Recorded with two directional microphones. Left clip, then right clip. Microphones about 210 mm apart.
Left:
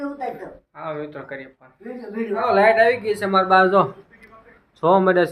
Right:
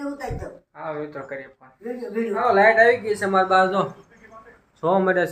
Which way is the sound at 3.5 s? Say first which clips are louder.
Left 6 dB; 35° left (ahead or behind).